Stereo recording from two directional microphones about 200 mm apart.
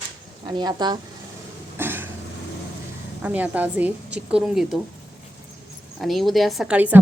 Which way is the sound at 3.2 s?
10° right (ahead or behind).